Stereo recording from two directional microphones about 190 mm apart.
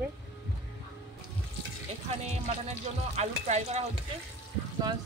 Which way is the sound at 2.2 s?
35° right (ahead or behind).